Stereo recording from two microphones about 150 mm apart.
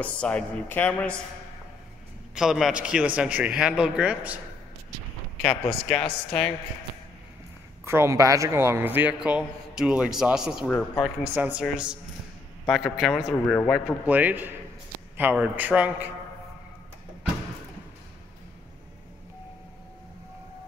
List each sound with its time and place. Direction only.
0.0 s speech: 10° left (ahead or behind)
2.3 s a man's voice: 5° right (ahead or behind)
5.4 s a man's voice: centre (ahead or behind)
7.8 s a man's voice: 15° right (ahead or behind)
10.7 s speech: 15° left (ahead or behind)
11.3 s a man's voice: 10° right (ahead or behind)
13.5 s speech: 10° left (ahead or behind)
14.0 s a man's voice: 10° right (ahead or behind)